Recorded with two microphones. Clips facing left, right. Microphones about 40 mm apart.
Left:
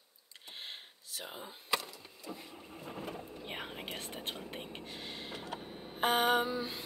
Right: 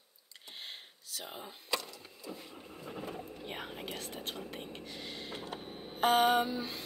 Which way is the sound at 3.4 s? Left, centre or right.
Centre.